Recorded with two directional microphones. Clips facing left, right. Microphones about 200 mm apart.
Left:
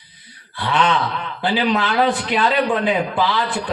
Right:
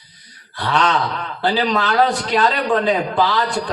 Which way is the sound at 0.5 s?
40° right (ahead or behind).